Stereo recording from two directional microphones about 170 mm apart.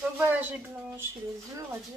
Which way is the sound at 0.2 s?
10° right (ahead or behind).